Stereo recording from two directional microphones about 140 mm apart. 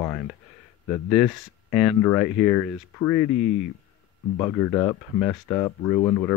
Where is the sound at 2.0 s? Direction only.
15° left (ahead or behind).